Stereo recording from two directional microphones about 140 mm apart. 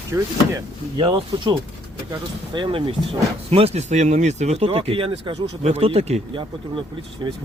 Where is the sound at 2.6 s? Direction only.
35° right (ahead or behind).